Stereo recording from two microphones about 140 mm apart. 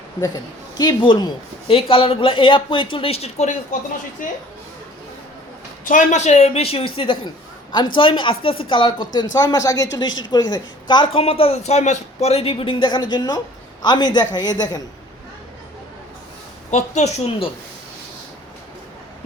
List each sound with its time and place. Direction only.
0.2 s speech: 30° left (ahead or behind); by 3.8 s 55° left (ahead or behind)
4.2 s a woman's voice: 65° left (ahead or behind)
5.9 s a man's voice: 60° left (ahead or behind); by 14.8 s 30° left (ahead or behind)
16.7 s a man's voice: 55° left (ahead or behind)